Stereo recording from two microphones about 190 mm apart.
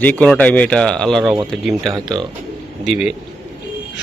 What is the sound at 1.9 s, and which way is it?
Speech, 25° right (ahead or behind).